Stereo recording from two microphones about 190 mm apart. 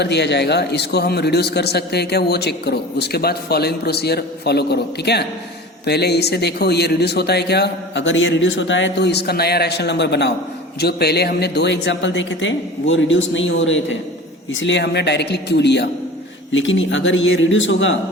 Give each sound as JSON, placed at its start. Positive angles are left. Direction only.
{"t": 0.0, "sound": "a man's voice", "side_deg": 65}
{"t": 16.5, "sound": "a man's voice", "side_deg": 80}